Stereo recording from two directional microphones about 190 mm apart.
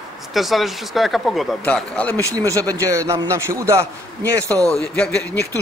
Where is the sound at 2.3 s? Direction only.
15° right (ahead or behind).